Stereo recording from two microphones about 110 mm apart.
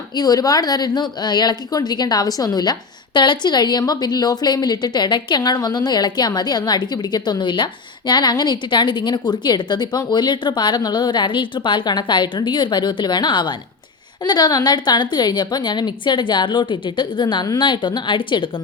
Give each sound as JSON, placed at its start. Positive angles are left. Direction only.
{"t": 0.2, "sound": "a woman's voice", "side_deg": 35}